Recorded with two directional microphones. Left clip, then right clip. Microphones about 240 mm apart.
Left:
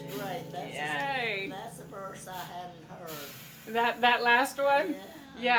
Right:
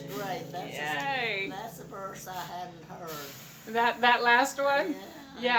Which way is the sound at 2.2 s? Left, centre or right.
Right.